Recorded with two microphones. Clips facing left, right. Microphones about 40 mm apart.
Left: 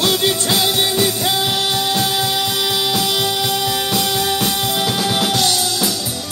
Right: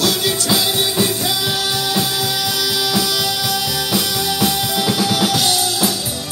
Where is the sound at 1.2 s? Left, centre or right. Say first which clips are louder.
Left 2 dB; left.